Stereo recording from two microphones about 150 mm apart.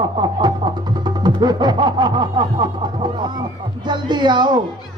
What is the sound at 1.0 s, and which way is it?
Music, 30° right (ahead or behind).